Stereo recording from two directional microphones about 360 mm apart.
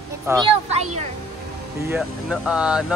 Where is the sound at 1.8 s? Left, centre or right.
Centre.